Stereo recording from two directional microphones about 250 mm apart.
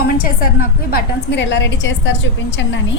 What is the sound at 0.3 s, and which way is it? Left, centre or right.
A woman's voice, left.